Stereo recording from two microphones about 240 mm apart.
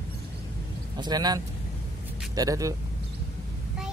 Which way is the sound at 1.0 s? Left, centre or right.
Centre.